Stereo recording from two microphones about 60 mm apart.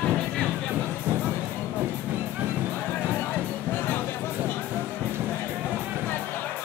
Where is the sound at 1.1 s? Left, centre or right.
Right.